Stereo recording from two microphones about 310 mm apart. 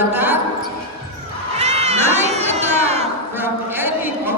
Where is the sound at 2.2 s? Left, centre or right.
Right.